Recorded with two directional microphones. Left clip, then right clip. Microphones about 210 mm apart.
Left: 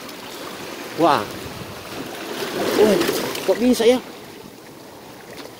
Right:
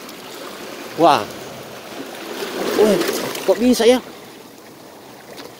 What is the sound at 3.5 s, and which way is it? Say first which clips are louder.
Speech: right 3 dB; 20° right (ahead or behind).